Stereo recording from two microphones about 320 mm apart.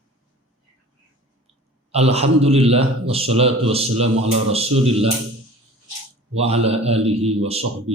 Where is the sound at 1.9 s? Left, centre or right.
Centre.